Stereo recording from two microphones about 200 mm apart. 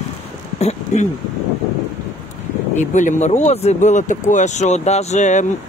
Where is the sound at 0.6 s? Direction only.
30° left (ahead or behind).